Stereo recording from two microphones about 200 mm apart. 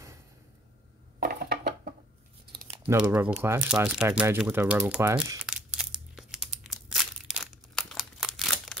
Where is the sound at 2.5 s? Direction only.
25° right (ahead or behind).